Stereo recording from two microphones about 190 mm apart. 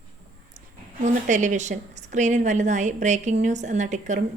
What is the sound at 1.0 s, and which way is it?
A woman's voice, 40° right (ahead or behind).